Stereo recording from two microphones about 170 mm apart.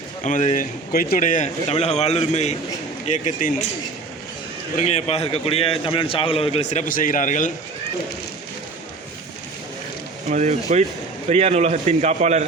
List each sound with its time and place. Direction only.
0.3 s a man's voice: 50° left (ahead or behind)
1.7 s a man's voice: 40° left (ahead or behind)
4.8 s speech: 40° left (ahead or behind)
10.2 s a man's voice: 45° right (ahead or behind)